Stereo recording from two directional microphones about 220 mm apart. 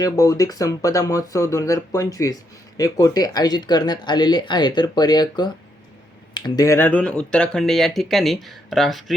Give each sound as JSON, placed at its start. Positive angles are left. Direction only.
{"t": 0.0, "sound": "speech", "side_deg": 15}